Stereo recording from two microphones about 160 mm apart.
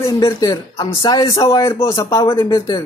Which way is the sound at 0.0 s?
20° left (ahead or behind).